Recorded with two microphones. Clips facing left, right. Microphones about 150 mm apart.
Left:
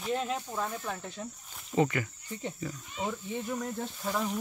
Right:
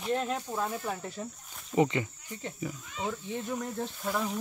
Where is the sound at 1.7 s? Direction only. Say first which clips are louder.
Right 1 dB; 20° right (ahead or behind).